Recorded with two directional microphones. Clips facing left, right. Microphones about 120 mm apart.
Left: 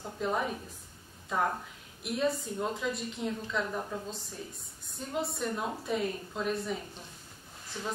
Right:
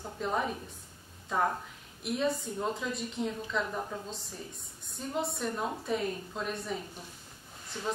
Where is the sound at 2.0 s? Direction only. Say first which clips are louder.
Even; centre (ahead or behind).